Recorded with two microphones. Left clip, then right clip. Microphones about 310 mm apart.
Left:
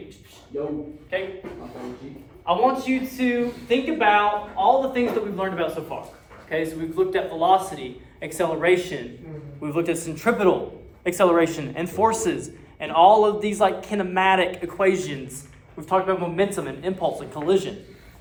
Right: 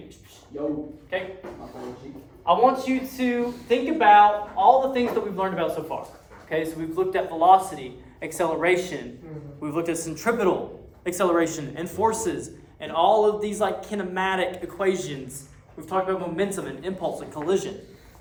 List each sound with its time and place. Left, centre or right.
1.1 s speech: right
2.4 s a man's voice: right; by 17.7 s centre